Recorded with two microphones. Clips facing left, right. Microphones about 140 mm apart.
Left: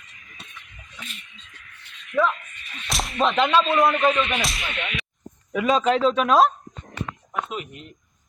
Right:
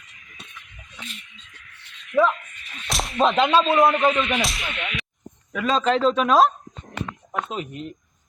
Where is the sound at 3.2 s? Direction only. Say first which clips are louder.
Right 2 dB; 25° right (ahead or behind).